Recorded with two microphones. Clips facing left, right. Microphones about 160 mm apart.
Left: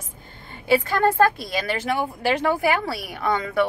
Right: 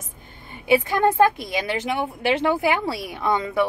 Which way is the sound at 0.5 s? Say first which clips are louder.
Right 1 dB; 15° right (ahead or behind).